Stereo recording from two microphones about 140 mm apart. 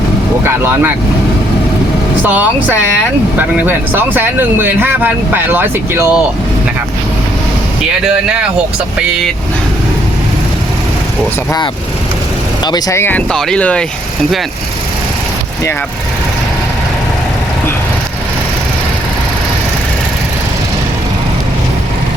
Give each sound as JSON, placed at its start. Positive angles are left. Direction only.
{"t": 0.4, "sound": "speech", "side_deg": -15}
{"t": 2.2, "sound": "speech", "side_deg": -15}
{"t": 8.0, "sound": "speech", "side_deg": -5}
{"t": 12.6, "sound": "speech", "side_deg": 30}
{"t": 13.0, "sound": "speech", "side_deg": 10}